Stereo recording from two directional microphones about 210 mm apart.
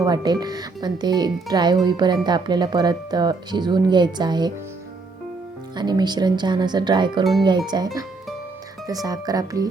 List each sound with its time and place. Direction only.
0.0 s speech: 20° right (ahead or behind)
5.7 s speech: 20° right (ahead or behind)
8.9 s speech: 15° right (ahead or behind)